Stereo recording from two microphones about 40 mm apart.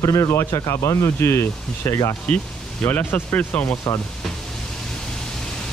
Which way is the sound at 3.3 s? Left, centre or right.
Left.